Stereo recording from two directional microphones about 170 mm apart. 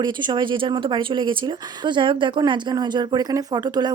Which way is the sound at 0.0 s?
25° right (ahead or behind).